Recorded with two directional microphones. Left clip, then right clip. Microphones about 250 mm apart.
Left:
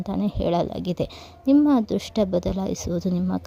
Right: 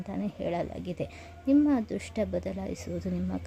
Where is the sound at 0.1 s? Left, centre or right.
Left.